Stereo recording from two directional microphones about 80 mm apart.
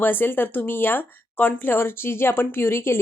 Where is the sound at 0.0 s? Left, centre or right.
Left.